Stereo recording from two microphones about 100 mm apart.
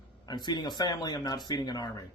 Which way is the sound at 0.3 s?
45° left (ahead or behind).